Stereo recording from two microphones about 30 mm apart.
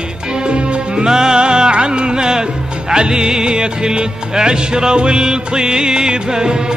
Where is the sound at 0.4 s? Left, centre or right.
Right.